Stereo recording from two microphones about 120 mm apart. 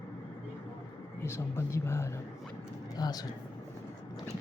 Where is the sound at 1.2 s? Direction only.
20° left (ahead or behind).